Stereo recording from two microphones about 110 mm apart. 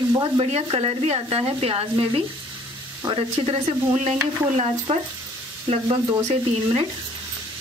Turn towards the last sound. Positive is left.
turn(degrees=-55)  # may be behind; listen again after turning